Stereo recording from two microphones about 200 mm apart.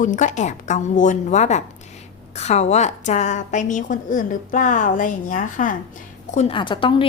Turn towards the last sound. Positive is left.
turn(degrees=25)  # may be behind; listen again after turning